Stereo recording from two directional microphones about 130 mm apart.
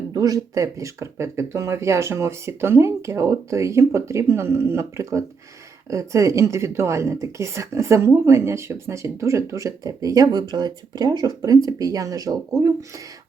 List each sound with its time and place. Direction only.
0.1 s speech: 30° right (ahead or behind)